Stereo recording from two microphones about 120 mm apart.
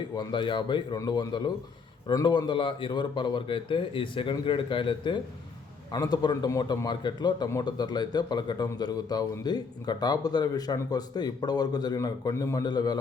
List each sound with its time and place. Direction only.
0.2 s a man's voice: 40° left (ahead or behind)